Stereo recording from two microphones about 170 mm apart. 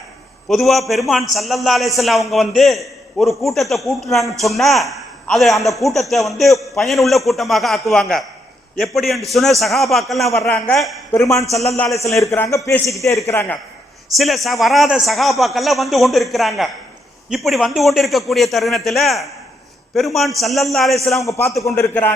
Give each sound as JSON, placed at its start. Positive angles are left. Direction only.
{"t": 0.4, "sound": "a man's voice", "side_deg": 0}
{"t": 11.1, "sound": "a man's voice", "side_deg": 15}
{"t": 11.5, "sound": "a man's voice", "side_deg": 0}
{"t": 12.2, "sound": "a man's voice", "side_deg": 15}
{"t": 14.2, "sound": "a man's voice", "side_deg": 0}
{"t": 21.2, "sound": "a man's voice", "side_deg": 20}